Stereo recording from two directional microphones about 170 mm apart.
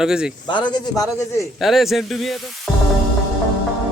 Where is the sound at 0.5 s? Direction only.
25° left (ahead or behind).